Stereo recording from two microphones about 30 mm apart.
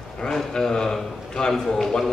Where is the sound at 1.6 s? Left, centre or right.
Centre.